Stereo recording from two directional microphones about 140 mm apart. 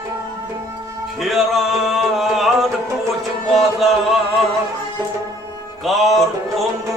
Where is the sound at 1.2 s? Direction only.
Centre (ahead or behind).